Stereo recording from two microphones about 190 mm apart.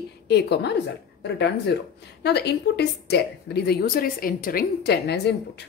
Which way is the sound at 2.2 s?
60° left (ahead or behind).